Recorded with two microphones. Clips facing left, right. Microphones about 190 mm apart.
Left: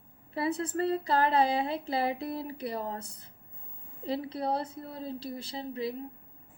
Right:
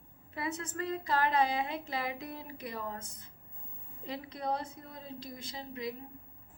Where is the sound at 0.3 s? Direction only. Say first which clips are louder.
Left 7 dB; 30° left (ahead or behind).